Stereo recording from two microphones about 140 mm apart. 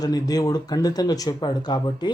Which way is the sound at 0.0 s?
25° left (ahead or behind).